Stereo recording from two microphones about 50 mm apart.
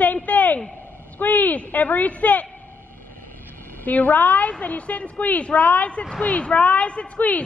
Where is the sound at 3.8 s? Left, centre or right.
Left.